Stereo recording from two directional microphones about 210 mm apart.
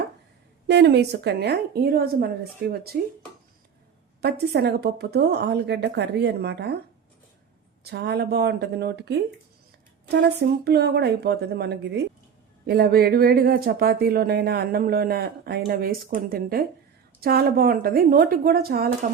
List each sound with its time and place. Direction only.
0.7 s speech: 55° right (ahead or behind)
4.2 s speech: 50° right (ahead or behind)
7.9 s speech: 50° right (ahead or behind)